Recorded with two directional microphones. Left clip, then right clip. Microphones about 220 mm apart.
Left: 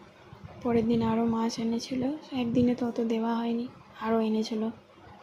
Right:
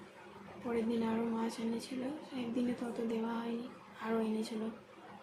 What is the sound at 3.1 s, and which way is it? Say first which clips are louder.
A woman's voice: left 9 dB; 30° left (ahead or behind).